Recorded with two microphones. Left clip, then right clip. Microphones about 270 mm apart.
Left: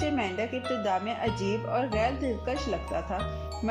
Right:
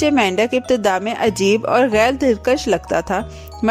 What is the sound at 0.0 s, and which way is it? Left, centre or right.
Speech, right.